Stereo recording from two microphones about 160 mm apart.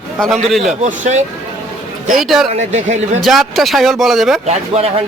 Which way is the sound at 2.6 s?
45° right (ahead or behind).